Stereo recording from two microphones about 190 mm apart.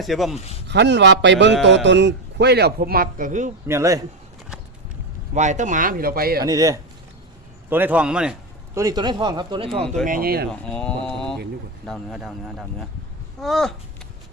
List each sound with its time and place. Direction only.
0.0 s speech: centre (ahead or behind)
0.7 s a man's voice: 65° right (ahead or behind); by 3.5 s 40° right (ahead or behind)
3.7 s speech: 15° right (ahead or behind)
5.3 s speech: 40° right (ahead or behind)
6.4 s speech: 20° right (ahead or behind)
8.7 s speech: 20° right (ahead or behind)
10.1 s speech: 50° right (ahead or behind)
10.5 s speech: 5° left (ahead or behind)